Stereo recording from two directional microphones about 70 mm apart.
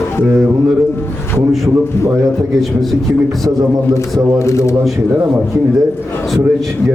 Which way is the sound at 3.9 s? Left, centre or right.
Left.